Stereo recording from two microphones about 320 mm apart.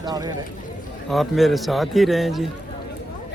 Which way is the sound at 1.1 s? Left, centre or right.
Centre.